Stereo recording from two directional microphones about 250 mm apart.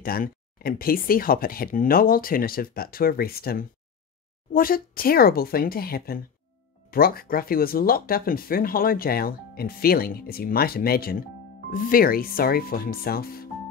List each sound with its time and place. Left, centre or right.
0.0 s speech: left